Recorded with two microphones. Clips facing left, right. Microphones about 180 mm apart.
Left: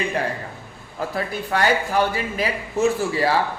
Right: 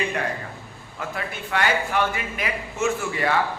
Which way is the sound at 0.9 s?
35° left (ahead or behind).